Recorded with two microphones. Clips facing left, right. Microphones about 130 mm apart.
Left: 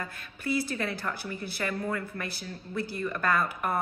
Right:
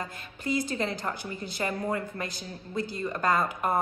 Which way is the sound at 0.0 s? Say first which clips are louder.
Right 1 dB; 15° right (ahead or behind).